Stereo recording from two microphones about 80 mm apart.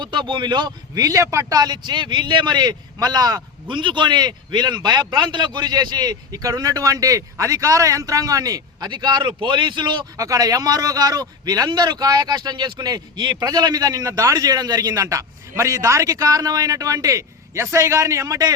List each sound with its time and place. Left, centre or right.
0.0 s speech: right
1.0 s speech: right
1.5 s a man's voice: right
3.7 s a man's voice: right
8.9 s speech: right
10.2 s speech: right